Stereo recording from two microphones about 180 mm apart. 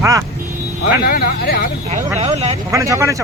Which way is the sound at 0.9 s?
55° left (ahead or behind).